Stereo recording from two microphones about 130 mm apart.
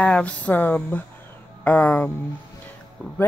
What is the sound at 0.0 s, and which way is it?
Speech, 10° left (ahead or behind).